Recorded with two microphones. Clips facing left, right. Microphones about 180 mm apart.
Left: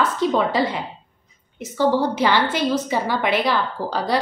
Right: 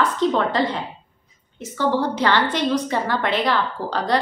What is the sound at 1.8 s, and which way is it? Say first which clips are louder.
A woman's voice: left 2 dB; 10° left (ahead or behind).